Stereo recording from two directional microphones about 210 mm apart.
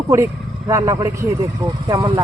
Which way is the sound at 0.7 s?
15° right (ahead or behind).